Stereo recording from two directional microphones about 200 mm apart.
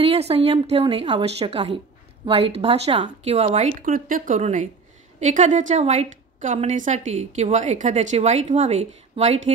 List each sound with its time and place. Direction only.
0.0 s a woman's voice: 30° right (ahead or behind)